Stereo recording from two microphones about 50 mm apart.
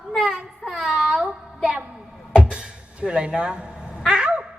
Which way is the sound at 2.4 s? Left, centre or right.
Right.